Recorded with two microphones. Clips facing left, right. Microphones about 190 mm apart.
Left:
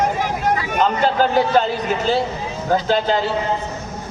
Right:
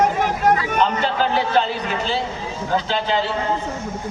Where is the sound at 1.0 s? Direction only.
45° left (ahead or behind).